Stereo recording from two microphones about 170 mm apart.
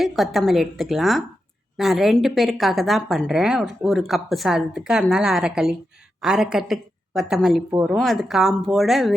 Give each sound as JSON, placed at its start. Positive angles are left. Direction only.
{"t": 0.0, "sound": "a woman's voice", "side_deg": 0}
{"t": 7.9, "sound": "a woman's voice", "side_deg": 0}